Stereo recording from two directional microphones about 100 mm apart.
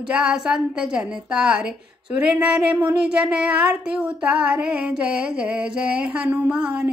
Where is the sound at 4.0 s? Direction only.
10° right (ahead or behind).